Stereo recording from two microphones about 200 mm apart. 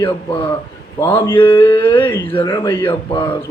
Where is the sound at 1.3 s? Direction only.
25° left (ahead or behind).